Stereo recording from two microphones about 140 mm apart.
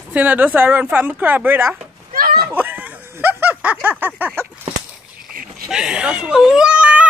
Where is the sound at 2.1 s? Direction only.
90° right.